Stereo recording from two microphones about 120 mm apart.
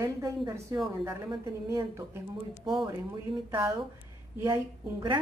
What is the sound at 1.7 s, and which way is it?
Speech, 20° right (ahead or behind).